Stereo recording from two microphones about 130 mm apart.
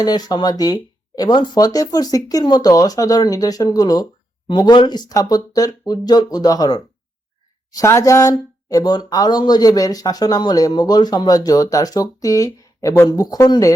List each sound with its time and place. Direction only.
0.0 s speech: 30° left (ahead or behind)